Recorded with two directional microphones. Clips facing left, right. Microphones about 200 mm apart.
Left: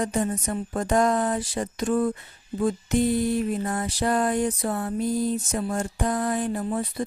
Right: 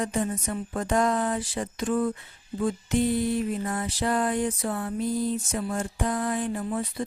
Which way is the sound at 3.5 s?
45° left (ahead or behind).